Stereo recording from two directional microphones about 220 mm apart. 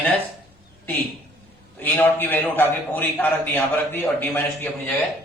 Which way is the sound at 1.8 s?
10° left (ahead or behind).